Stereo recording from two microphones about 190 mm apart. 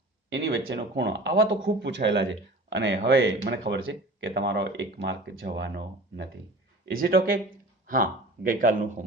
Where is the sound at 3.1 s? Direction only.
80° right; by 6.3 s 65° right (ahead or behind).